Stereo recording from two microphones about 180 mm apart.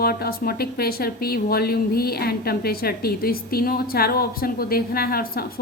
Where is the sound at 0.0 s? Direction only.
55° left (ahead or behind).